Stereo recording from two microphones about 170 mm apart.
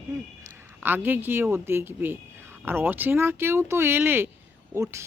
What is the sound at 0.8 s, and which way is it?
Speech, 10° right (ahead or behind).